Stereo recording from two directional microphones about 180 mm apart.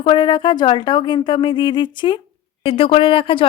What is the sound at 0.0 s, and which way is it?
Speech, 25° left (ahead or behind).